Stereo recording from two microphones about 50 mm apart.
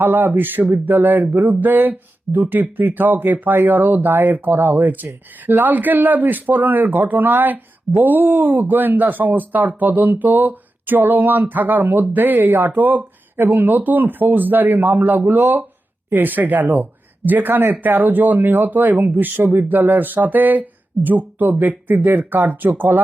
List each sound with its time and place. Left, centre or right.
0.0 s speech: right